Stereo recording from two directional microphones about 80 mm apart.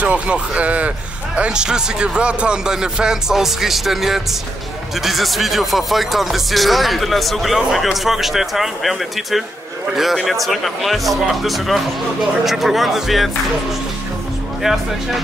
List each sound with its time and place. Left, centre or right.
0.0 s a man's voice: centre
14.6 s speech: centre